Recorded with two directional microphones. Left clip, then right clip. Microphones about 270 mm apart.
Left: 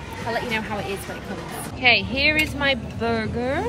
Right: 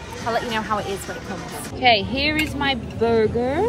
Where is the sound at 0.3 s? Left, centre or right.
Centre.